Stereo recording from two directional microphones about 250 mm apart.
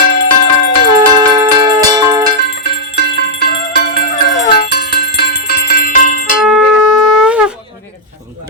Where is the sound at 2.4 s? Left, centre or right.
Left.